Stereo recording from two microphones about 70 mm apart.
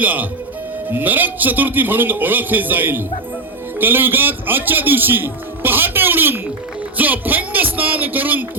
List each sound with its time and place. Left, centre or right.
0.0 s a man's voice: right